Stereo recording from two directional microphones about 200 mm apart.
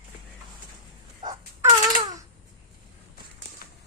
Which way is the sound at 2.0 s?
20° right (ahead or behind).